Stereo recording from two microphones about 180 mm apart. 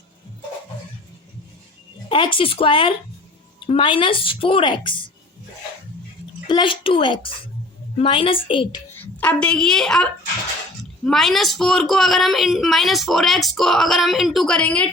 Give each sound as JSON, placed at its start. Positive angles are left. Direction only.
{"t": 2.0, "sound": "a woman's voice", "side_deg": 25}
{"t": 6.5, "sound": "a woman's voice", "side_deg": 30}
{"t": 9.0, "sound": "a woman's voice", "side_deg": 10}